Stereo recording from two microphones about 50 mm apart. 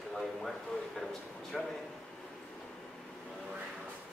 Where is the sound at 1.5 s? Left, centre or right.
Centre.